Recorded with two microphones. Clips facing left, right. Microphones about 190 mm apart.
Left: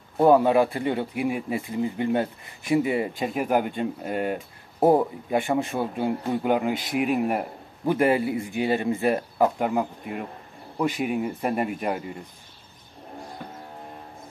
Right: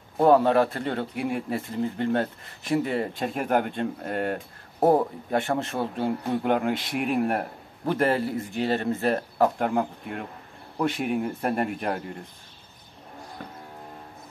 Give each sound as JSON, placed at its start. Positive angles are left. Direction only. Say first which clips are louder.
{"t": 0.2, "sound": "a man's voice", "louder": "left 1 dB", "side_deg": 5}